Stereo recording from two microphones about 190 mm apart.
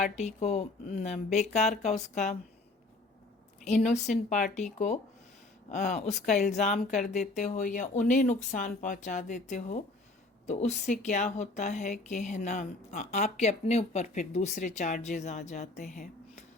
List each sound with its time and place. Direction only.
0.0 s a woman's voice: 35° left (ahead or behind)
3.6 s a woman's voice: 40° left (ahead or behind)